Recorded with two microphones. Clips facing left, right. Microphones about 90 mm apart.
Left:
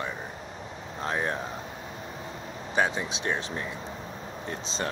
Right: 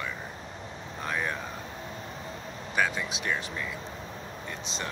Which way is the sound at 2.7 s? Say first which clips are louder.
Left 2 dB; 25° left (ahead or behind).